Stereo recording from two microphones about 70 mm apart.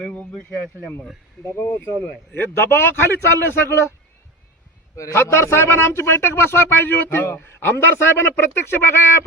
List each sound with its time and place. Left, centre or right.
0.0 s speech: centre
1.5 s a man's voice: left
5.1 s a man's voice: left